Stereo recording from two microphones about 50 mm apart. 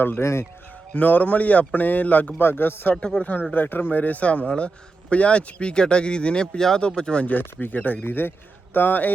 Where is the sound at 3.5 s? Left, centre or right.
Left; by 7.3 s centre.